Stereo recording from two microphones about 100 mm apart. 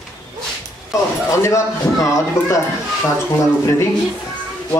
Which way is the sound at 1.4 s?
30° left (ahead or behind).